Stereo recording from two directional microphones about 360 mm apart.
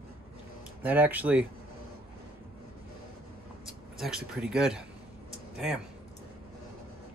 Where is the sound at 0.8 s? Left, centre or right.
Centre.